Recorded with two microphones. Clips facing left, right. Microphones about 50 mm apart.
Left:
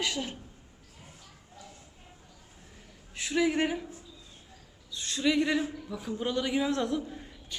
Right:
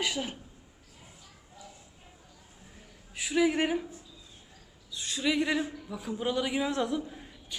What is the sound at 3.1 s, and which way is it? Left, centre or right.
Speech, centre.